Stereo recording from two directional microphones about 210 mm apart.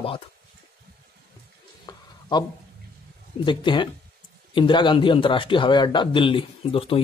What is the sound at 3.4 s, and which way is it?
A man's voice, 20° left (ahead or behind).